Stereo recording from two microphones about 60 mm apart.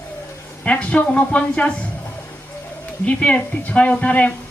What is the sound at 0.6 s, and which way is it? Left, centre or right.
Speech, left.